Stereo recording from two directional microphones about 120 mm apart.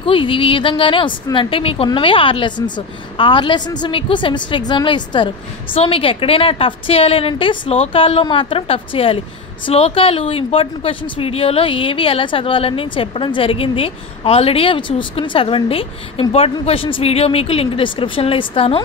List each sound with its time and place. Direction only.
0.0 s a woman's voice: 45° left (ahead or behind)
5.8 s a woman's voice: 50° left (ahead or behind)